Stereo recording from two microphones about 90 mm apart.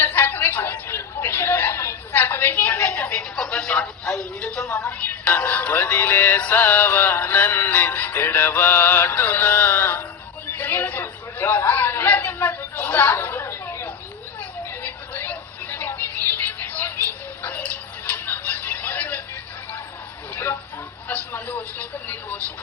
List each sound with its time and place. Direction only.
0.0 s a sound: 25° left (ahead or behind)
4.7 s speech: 15° left (ahead or behind)
6.4 s music: 20° left (ahead or behind)
10.4 s chatter: 20° left (ahead or behind)
14.7 s music: 20° left (ahead or behind)
20.3 s a sound: 25° left (ahead or behind)
21.3 s vehicle: 20° left (ahead or behind)